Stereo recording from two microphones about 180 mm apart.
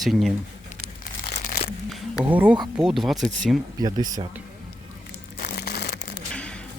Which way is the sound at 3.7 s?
20° right (ahead or behind).